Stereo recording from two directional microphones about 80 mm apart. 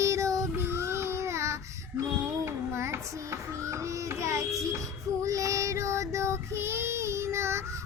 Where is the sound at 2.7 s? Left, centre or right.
Right.